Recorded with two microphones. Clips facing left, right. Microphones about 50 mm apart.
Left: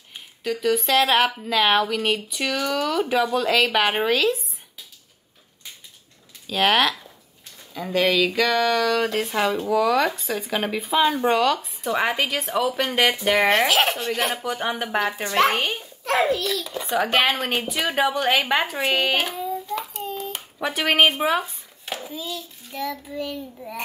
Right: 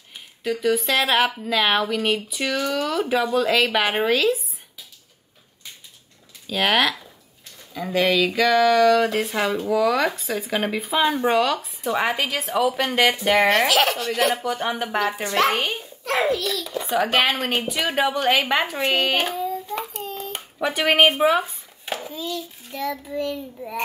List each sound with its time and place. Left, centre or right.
0.4 s speech: centre
6.4 s speech: centre
13.5 s speech: left
14.3 s speech: centre
16.3 s a child's voice: left
16.6 s a sound: centre
17.6 s speech: centre
19.3 s child singing: centre
19.9 s a child's voice: centre